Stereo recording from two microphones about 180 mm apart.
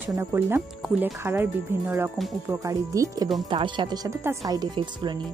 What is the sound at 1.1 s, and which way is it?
Speech, 15° right (ahead or behind).